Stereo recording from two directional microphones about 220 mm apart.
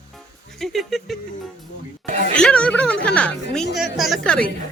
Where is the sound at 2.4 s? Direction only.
5° left (ahead or behind).